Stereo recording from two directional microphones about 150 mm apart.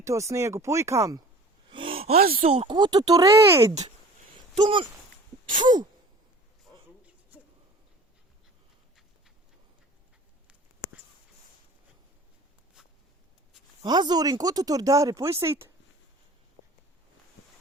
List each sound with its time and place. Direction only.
0.0 s speech: 20° right (ahead or behind)
1.7 s gasp: 35° right (ahead or behind)
2.1 s speech: 80° right
2.5 s speech: 40° right (ahead or behind); by 3.7 s 20° right (ahead or behind)
4.5 s speech: 30° right (ahead or behind)
7.3 s a sound: 10° right (ahead or behind)
13.8 s speech: 30° right (ahead or behind)